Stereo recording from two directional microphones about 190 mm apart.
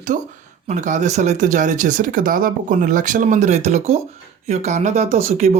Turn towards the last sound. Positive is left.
turn(degrees=-35)  # may be behind; listen again after turning